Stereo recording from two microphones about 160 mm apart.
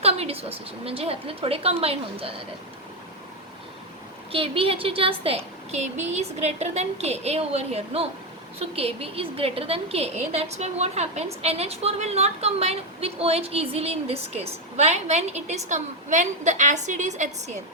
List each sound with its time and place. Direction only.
0.0 s a woman's voice: 40° right (ahead or behind)
4.3 s a woman's voice: 35° right (ahead or behind)